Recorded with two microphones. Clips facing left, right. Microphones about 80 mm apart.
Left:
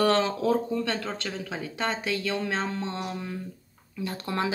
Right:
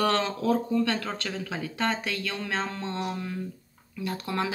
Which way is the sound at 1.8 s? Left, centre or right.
Centre.